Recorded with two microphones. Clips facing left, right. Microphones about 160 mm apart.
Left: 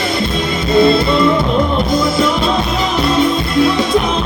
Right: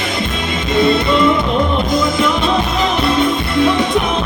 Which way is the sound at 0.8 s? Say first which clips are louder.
Left 3 dB; 35° left (ahead or behind).